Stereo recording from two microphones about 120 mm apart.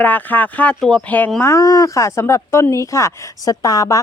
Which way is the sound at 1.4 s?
25° left (ahead or behind).